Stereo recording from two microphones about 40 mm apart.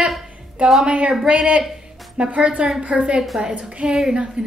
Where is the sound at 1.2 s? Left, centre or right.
Right.